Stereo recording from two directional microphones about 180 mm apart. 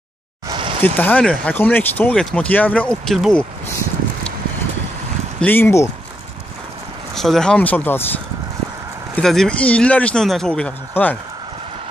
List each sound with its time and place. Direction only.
0.5 s a sound: 30° right (ahead or behind)
0.8 s speech: 10° left (ahead or behind)
5.4 s speech: 10° left (ahead or behind)
7.2 s speech: centre (ahead or behind)
9.1 s speech: centre (ahead or behind)